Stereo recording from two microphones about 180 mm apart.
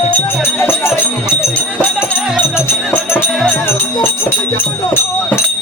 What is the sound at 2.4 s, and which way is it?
Music, 15° left (ahead or behind).